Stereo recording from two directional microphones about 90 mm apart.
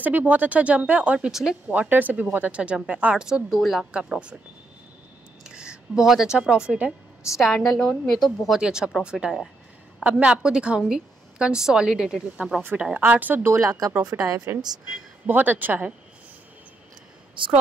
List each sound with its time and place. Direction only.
0.0 s speech: 15° right (ahead or behind)
1.7 s speech: 20° right (ahead or behind)
5.4 s a woman's voice: 10° right (ahead or behind)
13.6 s a woman's voice: 40° right (ahead or behind)
15.2 s a woman's voice: 20° right (ahead or behind)